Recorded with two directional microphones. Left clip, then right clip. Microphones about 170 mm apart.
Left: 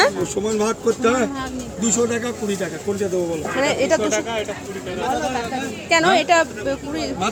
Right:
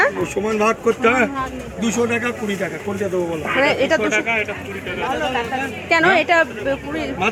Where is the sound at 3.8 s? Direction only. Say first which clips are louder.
Right 1 dB; 20° left (ahead or behind).